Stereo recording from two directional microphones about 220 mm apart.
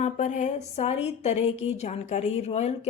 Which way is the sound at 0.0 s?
35° left (ahead or behind).